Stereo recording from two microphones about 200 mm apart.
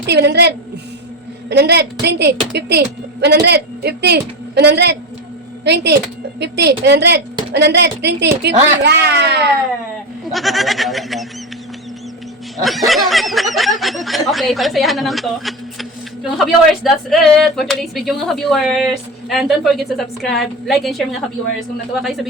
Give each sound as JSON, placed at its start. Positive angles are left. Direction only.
{"t": 0.0, "sound": "a woman's voice", "side_deg": -55}
{"t": 10.3, "sound": "speech", "side_deg": 0}
{"t": 12.6, "sound": "speech", "side_deg": 0}